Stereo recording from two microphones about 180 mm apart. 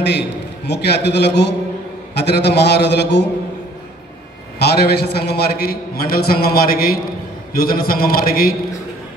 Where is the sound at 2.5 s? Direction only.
70° left (ahead or behind).